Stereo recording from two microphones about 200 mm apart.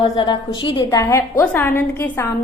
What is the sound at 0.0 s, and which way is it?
A woman's voice, 25° left (ahead or behind).